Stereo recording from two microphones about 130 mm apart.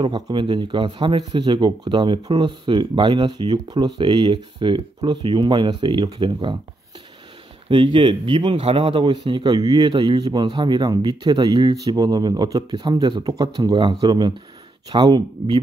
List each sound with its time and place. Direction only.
0.0 s speech: 40° right (ahead or behind)
7.6 s speech: 40° right (ahead or behind)